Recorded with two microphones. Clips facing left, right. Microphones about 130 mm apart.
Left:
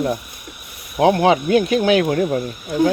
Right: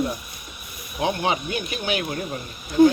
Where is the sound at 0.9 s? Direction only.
80° left.